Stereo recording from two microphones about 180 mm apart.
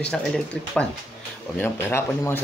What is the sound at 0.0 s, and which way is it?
Speech, 5° left (ahead or behind).